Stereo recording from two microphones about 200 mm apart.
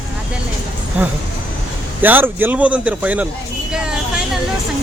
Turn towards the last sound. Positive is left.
turn(degrees=-5)  # may be behind; listen again after turning